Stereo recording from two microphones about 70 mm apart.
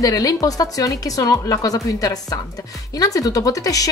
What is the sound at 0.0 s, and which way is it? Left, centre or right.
A woman's voice, left.